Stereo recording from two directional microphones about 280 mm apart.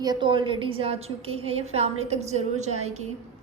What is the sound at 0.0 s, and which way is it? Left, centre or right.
A woman's voice, centre.